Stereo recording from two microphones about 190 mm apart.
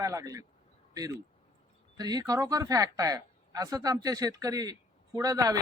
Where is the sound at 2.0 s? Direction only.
20° right (ahead or behind).